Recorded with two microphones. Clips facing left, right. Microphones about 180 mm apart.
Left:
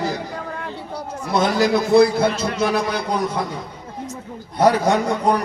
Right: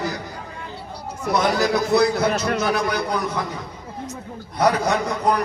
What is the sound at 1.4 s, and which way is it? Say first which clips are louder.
A man's voice: left 3 dB; 30° left (ahead or behind).